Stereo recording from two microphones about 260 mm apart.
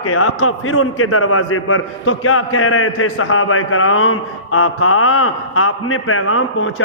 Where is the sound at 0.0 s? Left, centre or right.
Left.